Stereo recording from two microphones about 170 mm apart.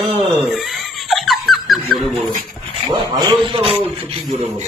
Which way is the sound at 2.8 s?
25° right (ahead or behind).